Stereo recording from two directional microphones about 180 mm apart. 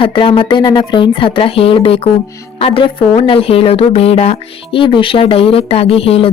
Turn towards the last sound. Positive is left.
turn(degrees=30)  # may be behind; listen again after turning